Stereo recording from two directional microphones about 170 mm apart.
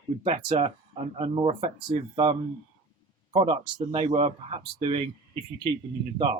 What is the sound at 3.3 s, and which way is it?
Speech, 30° right (ahead or behind).